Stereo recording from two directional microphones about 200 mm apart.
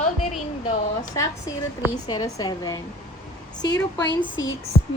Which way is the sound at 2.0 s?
20° left (ahead or behind).